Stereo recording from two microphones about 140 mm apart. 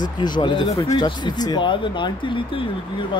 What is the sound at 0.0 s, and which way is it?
Speech, 30° left (ahead or behind).